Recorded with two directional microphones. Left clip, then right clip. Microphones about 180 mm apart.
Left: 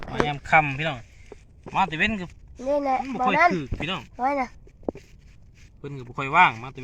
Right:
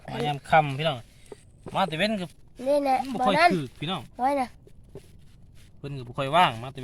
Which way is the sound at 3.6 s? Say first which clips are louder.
Left 2 dB; 90° right.